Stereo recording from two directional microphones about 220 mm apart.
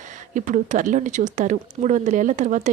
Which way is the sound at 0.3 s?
35° right (ahead or behind).